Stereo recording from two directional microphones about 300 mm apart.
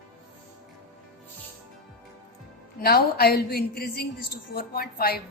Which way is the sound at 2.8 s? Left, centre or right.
Left.